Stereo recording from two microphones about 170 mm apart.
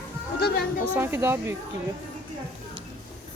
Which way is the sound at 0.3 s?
65° left (ahead or behind).